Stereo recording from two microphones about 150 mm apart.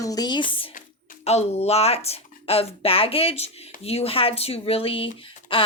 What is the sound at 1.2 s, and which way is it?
Speech, 45° left (ahead or behind).